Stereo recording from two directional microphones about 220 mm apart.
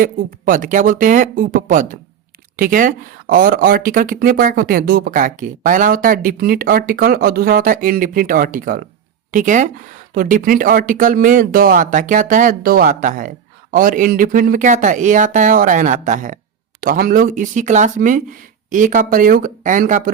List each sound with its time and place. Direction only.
0.0 s speech: 35° right (ahead or behind)